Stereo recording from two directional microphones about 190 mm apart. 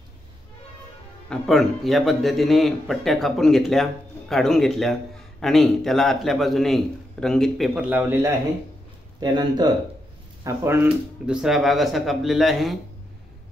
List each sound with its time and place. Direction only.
1.3 s speech: centre (ahead or behind)
9.2 s speech: 25° right (ahead or behind); by 12.7 s centre (ahead or behind)